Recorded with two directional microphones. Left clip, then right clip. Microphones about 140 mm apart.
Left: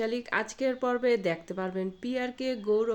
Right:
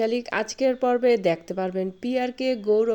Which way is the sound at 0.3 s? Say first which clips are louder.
Right 6 dB; 30° right (ahead or behind).